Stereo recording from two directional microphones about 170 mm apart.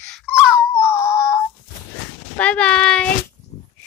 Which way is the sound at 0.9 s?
15° left (ahead or behind).